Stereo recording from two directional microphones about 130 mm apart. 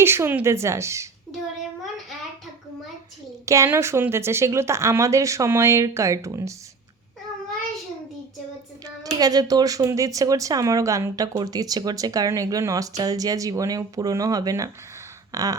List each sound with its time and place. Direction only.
0.0 s speech: 20° right (ahead or behind)
3.4 s speech: 25° right (ahead or behind)
9.0 s speech: 30° right (ahead or behind)
15.3 s a sound: 25° right (ahead or behind)